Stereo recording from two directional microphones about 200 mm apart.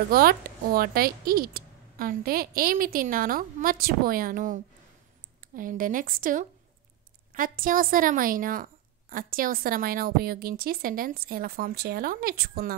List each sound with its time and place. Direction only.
0.1 s a woman's voice: 50° right (ahead or behind)
5.6 s a woman's voice: 45° right (ahead or behind)